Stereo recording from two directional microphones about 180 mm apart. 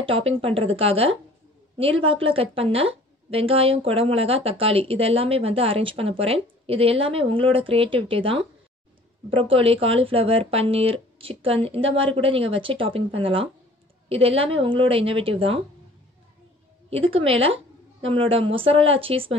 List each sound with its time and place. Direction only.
0.0 s a woman's voice: 30° right (ahead or behind)
16.9 s a woman's voice: 30° right (ahead or behind)